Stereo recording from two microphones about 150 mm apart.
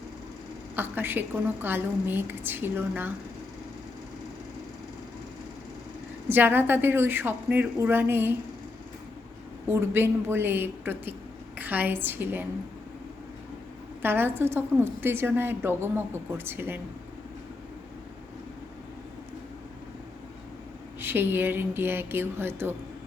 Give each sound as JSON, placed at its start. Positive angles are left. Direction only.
{"t": 0.8, "sound": "a woman's voice", "side_deg": -15}
{"t": 6.2, "sound": "a woman's voice", "side_deg": -15}
{"t": 9.6, "sound": "a woman's voice", "side_deg": -15}
{"t": 14.0, "sound": "a woman's voice", "side_deg": -15}
{"t": 21.0, "sound": "a woman's voice", "side_deg": -15}